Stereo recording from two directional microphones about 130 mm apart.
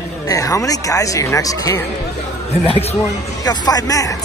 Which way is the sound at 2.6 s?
45° left (ahead or behind).